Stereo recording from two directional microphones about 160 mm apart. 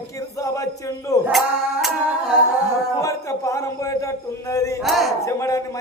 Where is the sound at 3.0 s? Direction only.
20° left (ahead or behind).